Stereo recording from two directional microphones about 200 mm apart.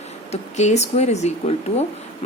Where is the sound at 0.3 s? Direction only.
35° left (ahead or behind).